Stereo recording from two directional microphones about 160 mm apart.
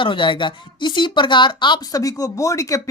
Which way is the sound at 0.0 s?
30° left (ahead or behind).